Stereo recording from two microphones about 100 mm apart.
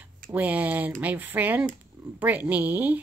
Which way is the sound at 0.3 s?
15° right (ahead or behind).